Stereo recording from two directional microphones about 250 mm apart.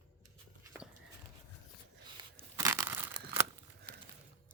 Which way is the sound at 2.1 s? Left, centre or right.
Centre.